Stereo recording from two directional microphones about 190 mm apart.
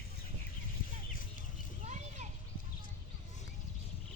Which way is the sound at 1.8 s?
40° right (ahead or behind).